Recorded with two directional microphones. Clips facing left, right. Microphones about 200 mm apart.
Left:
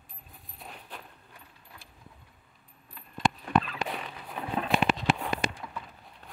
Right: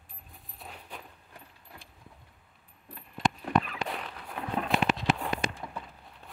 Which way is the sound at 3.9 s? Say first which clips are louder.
Even; centre (ahead or behind).